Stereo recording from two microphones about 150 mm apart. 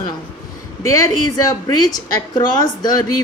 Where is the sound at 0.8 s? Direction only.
20° left (ahead or behind).